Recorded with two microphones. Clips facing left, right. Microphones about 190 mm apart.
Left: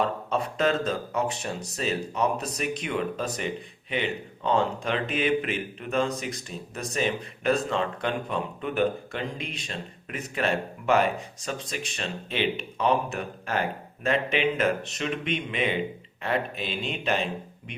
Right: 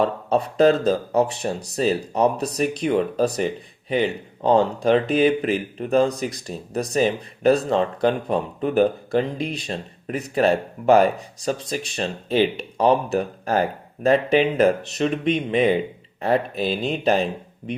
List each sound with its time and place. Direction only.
0.0 s speech: 35° right (ahead or behind)